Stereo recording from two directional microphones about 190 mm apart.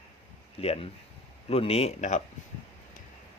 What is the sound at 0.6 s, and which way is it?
Speech, 35° left (ahead or behind).